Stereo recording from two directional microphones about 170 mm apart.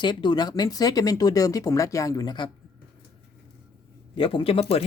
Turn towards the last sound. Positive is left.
turn(degrees=35)  # may be behind; listen again after turning